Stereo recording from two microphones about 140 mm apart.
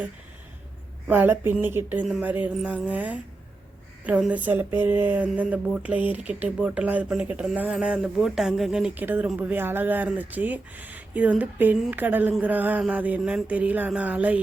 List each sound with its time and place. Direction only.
1.0 s speech: 15° right (ahead or behind)